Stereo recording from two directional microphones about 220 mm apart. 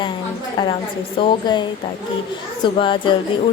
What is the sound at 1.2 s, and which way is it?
Speech, 25° left (ahead or behind).